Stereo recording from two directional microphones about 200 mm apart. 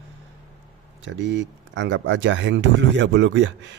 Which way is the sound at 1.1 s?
65° right (ahead or behind).